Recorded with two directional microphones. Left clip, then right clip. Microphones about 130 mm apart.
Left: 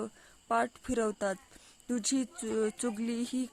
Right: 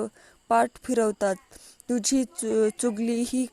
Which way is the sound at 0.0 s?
35° right (ahead or behind).